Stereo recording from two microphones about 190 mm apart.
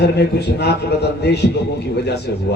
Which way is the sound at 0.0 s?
60° left (ahead or behind).